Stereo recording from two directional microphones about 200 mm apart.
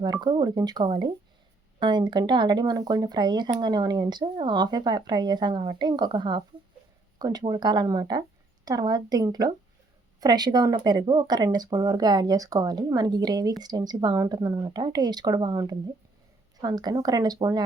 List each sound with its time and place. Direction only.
0.0 s speech: 20° right (ahead or behind)